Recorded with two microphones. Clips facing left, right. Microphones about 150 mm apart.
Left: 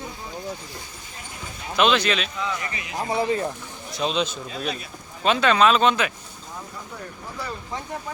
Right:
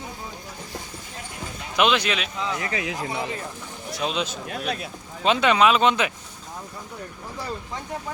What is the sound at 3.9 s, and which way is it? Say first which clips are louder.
Speech: left 2 dB; 5° right (ahead or behind).